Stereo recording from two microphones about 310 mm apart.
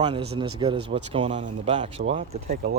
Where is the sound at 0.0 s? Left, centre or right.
Centre.